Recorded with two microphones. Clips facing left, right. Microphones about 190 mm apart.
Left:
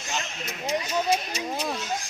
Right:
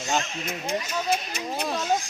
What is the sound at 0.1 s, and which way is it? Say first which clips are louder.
Speech: right 5 dB; 55° right (ahead or behind).